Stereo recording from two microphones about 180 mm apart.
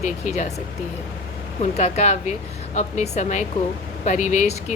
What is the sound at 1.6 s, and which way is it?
A woman's voice, 40° left (ahead or behind).